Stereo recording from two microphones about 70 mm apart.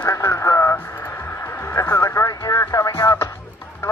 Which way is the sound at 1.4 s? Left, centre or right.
Left.